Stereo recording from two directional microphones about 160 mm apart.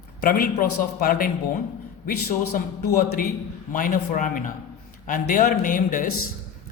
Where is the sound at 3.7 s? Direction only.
60° left (ahead or behind).